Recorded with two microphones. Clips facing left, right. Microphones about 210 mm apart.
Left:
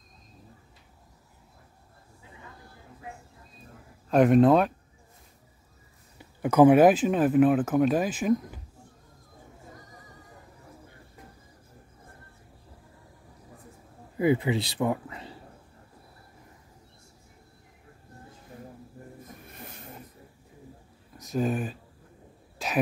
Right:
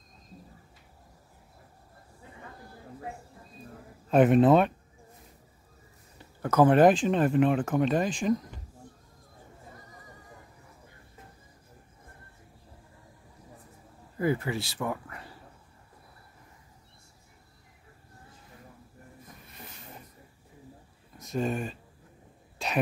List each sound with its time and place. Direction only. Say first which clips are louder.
4.1 s speech: left 1 dB; centre (ahead or behind)
6.1 s speech: left 3 dB; 15° left (ahead or behind)
14.1 s speech: left 4 dB; 15° left (ahead or behind)
21.2 s speech: left 2 dB; centre (ahead or behind)
22.6 s a sound: left 1 dB; centre (ahead or behind)